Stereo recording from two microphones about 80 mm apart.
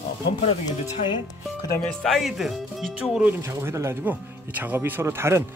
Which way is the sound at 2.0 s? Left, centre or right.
Centre.